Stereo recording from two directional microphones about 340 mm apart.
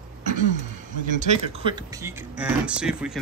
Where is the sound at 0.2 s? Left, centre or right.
Right.